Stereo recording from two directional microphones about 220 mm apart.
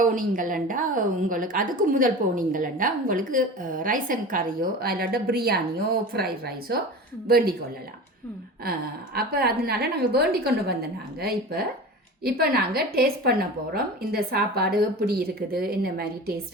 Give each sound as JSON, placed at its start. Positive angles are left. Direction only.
{"t": 0.0, "sound": "a woman's voice", "side_deg": -40}
{"t": 9.1, "sound": "a woman's voice", "side_deg": -45}